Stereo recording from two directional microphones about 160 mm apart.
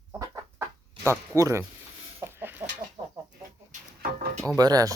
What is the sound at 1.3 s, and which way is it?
Speech, 15° right (ahead or behind).